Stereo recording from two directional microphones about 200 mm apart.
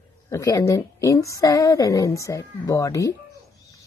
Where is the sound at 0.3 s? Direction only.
15° left (ahead or behind).